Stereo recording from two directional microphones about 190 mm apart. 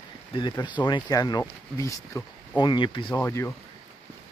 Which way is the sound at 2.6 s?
25° left (ahead or behind).